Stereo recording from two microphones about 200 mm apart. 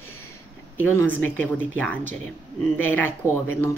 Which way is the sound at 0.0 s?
90° left.